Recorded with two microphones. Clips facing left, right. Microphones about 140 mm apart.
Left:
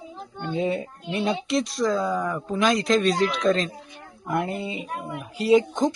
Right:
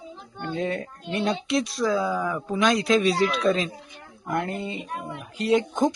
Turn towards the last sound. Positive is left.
turn(degrees=0)  # may be behind; listen again after turning